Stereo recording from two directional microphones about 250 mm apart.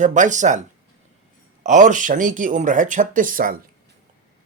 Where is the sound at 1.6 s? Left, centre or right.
Right.